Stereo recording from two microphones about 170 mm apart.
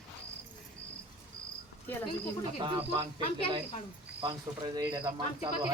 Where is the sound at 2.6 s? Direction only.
30° right (ahead or behind).